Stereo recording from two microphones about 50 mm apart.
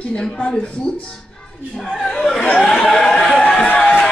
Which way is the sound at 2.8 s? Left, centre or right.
Centre.